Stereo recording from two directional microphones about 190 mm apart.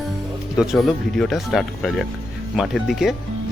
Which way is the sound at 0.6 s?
Centre (ahead or behind).